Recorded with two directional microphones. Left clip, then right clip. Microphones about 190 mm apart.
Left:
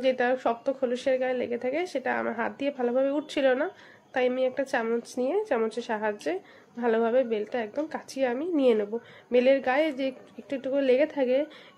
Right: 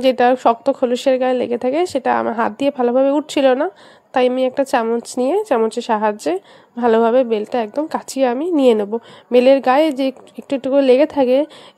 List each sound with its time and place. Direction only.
0.0 s speech: 45° right (ahead or behind)